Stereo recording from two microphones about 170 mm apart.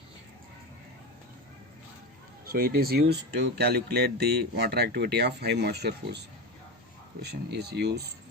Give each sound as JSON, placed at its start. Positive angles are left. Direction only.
{"t": 2.5, "sound": "speech", "side_deg": -60}